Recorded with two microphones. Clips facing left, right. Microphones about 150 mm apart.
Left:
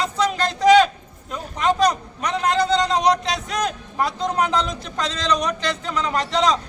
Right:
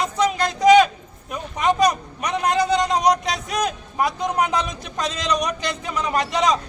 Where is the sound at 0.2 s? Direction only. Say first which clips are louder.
Right 1 dB; 15° right (ahead or behind).